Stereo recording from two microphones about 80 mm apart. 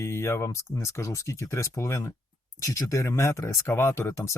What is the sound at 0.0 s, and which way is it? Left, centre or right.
Speech, left.